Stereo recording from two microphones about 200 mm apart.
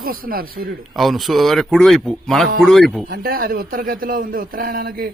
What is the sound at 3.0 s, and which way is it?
A man's voice, 50° right (ahead or behind).